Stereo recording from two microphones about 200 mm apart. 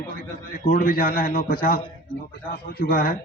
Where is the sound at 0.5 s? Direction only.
45° left (ahead or behind).